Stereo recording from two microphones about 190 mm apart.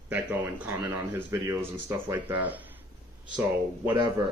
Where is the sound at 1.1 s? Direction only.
15° right (ahead or behind).